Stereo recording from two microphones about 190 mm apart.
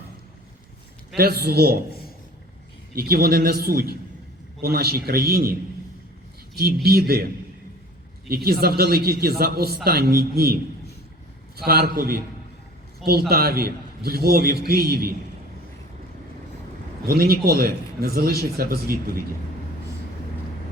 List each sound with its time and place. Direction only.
1.1 s a man's voice: 55° right (ahead or behind)
2.9 s a man's voice: 55° right (ahead or behind)
6.8 s a man's voice: 55° right (ahead or behind)
8.3 s a man's voice: 50° right (ahead or behind)
17.1 s a man's voice: 55° right (ahead or behind)